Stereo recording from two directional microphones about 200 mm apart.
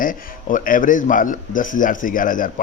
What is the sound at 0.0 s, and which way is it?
Speech, 45° left (ahead or behind).